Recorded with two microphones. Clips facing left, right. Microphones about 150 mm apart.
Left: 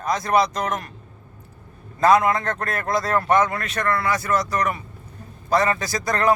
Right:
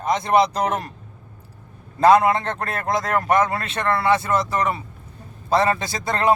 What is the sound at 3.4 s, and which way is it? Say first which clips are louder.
A man's voice: right 1 dB; 30° right (ahead or behind).